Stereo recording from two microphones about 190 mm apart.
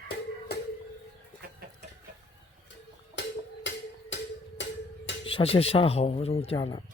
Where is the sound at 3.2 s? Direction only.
65° left (ahead or behind).